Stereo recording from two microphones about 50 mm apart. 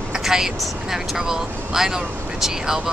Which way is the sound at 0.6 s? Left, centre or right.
Centre.